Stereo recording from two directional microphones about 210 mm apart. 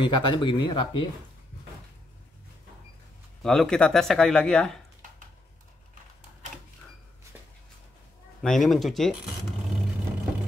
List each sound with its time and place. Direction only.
0.0 s speech: 20° left (ahead or behind)
3.4 s speech: 5° left (ahead or behind)
8.4 s speech: centre (ahead or behind)